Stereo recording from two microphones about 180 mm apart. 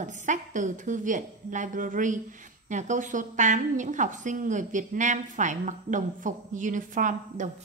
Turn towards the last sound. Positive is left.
turn(degrees=-45)  # may be behind; listen again after turning